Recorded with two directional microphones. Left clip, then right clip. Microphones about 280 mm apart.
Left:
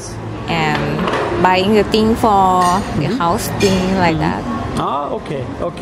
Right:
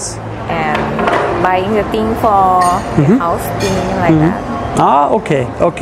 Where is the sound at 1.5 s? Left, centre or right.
Left.